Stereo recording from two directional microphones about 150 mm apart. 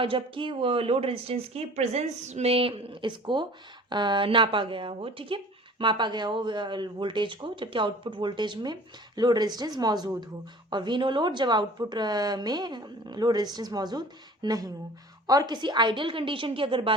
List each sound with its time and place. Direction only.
0.0 s a woman's voice: 35° right (ahead or behind)